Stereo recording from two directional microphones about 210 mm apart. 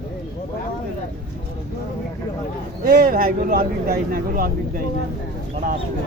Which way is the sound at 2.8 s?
45° right (ahead or behind).